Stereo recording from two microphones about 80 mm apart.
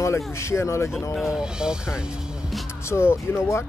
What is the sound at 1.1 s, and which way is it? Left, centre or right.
Speech, centre.